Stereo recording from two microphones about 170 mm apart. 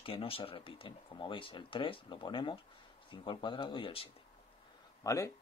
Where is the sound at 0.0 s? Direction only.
30° left (ahead or behind).